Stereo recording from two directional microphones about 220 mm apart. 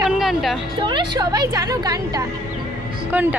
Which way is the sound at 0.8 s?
20° right (ahead or behind).